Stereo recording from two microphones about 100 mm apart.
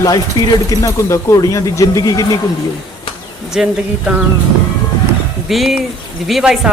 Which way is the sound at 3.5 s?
5° right (ahead or behind).